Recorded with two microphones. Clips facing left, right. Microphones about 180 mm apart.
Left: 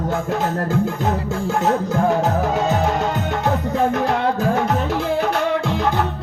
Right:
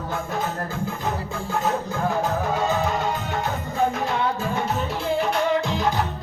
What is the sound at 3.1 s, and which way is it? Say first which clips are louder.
Music: left 6 dB; 75° left (ahead or behind).